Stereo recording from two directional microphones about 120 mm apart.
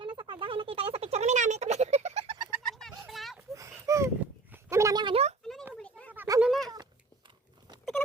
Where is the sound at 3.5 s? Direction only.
25° right (ahead or behind).